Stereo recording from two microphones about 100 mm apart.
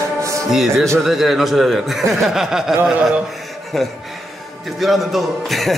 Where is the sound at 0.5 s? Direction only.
Centre (ahead or behind).